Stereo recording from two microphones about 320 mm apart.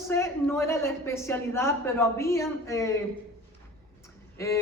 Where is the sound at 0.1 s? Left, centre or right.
Centre.